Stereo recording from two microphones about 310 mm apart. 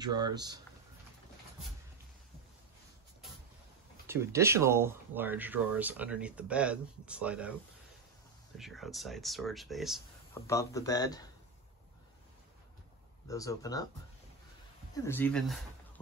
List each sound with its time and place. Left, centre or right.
0.0 s speech: centre
4.1 s speech: centre
8.5 s speech: centre
10.4 s speech: centre
13.3 s speech: centre
15.0 s speech: centre